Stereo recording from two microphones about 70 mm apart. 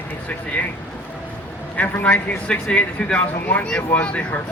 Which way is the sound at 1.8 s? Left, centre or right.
Left.